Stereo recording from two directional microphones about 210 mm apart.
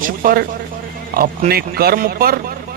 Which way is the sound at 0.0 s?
40° right (ahead or behind).